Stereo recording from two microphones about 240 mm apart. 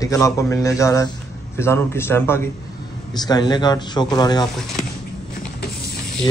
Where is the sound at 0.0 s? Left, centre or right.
Centre.